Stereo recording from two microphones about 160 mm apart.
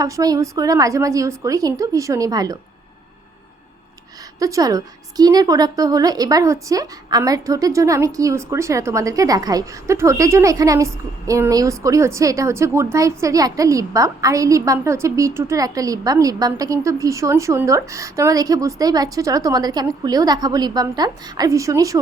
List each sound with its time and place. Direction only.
0.0 s a woman's voice: 20° right (ahead or behind)
4.4 s a woman's voice: 20° right (ahead or behind)